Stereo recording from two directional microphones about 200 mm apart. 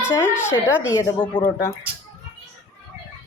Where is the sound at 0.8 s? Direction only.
15° left (ahead or behind).